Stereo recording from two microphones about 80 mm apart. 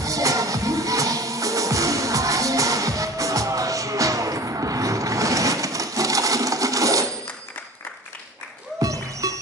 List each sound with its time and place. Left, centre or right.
0.0 s music: right
8.7 s music: right